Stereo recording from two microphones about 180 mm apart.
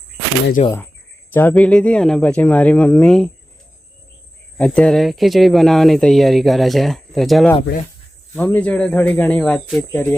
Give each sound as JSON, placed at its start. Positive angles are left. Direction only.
{"t": 0.6, "sound": "speech", "side_deg": 40}
{"t": 1.3, "sound": "speech", "side_deg": 10}
{"t": 4.5, "sound": "speech", "side_deg": 5}
{"t": 8.5, "sound": "speech", "side_deg": 5}